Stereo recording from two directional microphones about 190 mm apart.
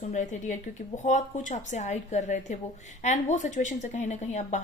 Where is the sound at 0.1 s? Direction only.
40° left (ahead or behind).